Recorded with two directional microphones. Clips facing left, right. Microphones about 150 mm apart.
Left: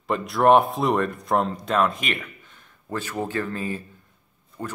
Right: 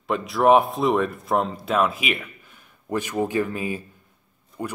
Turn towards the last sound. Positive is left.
turn(degrees=-15)  # may be behind; listen again after turning